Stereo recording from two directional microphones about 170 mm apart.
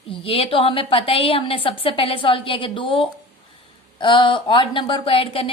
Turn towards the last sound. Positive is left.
turn(degrees=30)  # may be behind; listen again after turning